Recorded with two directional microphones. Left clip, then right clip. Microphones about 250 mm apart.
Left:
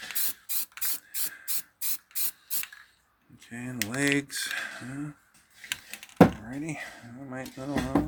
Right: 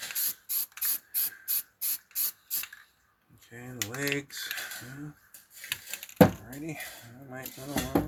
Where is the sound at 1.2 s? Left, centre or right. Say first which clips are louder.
Left 1 dB; left.